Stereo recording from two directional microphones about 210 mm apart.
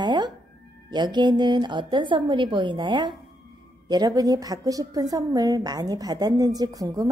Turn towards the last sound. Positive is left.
turn(degrees=-15)  # may be behind; listen again after turning